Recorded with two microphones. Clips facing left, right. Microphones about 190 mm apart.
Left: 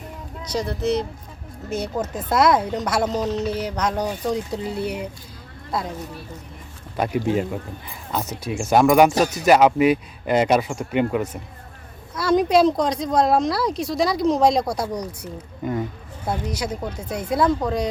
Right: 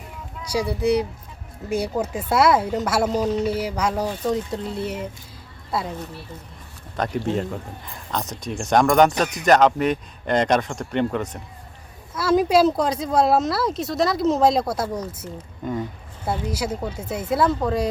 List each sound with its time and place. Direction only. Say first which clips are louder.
0.5 s a woman's voice: right 2 dB; 10° right (ahead or behind)
6.9 s a woman's voice: left 2 dB; 10° left (ahead or behind)
15.6 s speech: left 2 dB; 5° left (ahead or behind)
16.2 s speech: right 1 dB; 5° right (ahead or behind)